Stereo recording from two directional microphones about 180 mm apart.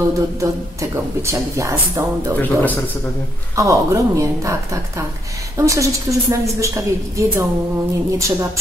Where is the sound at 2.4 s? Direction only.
10° left (ahead or behind).